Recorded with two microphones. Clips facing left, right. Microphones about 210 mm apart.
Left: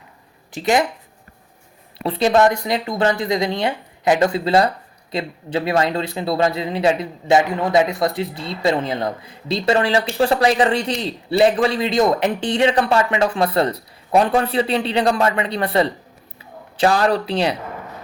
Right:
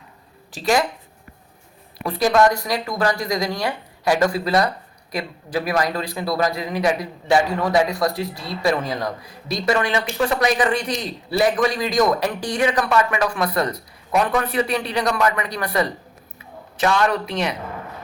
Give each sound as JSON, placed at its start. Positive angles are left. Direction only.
{"t": 0.5, "sound": "speech", "side_deg": 20}
{"t": 2.0, "sound": "speech", "side_deg": 25}